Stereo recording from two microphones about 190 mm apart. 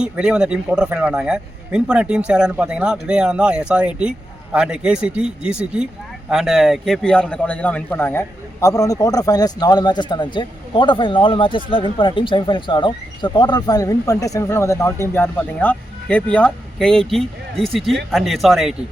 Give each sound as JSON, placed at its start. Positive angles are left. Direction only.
{"t": 0.0, "sound": "speech", "side_deg": -5}